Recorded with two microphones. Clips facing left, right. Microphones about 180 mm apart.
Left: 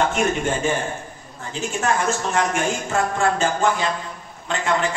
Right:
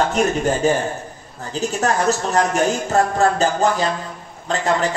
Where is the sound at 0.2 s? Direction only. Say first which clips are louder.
Right 4 dB; 35° right (ahead or behind).